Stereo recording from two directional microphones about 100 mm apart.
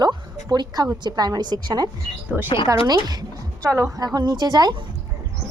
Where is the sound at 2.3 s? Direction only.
15° right (ahead or behind).